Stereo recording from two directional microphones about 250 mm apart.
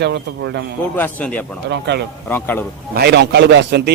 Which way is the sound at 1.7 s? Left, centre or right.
Right.